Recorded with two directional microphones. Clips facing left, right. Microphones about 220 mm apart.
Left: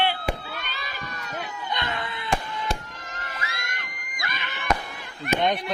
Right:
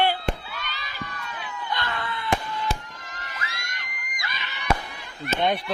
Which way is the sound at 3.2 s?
45° left (ahead or behind).